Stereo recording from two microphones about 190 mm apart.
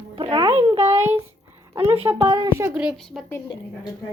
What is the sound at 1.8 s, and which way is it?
Speech, 30° right (ahead or behind).